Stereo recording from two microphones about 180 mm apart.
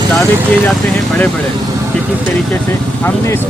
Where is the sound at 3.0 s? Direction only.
10° left (ahead or behind).